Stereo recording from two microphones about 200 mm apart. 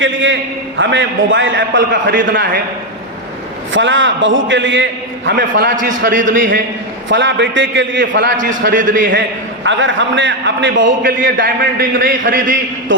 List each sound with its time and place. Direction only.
0.0 s a man's voice: 70° right (ahead or behind)
3.7 s a man's voice: 70° right (ahead or behind)
5.7 s a man's voice: 40° right (ahead or behind)
7.1 s a man's voice: 65° right (ahead or behind)
8.4 s a man's voice: 40° right (ahead or behind)
9.6 s a man's voice: 70° right (ahead or behind)
11.0 s a man's voice: 45° right (ahead or behind)